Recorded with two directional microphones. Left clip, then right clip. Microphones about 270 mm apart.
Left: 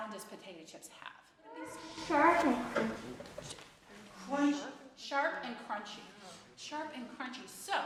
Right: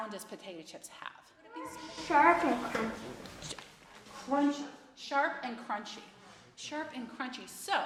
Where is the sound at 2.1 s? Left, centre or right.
Centre.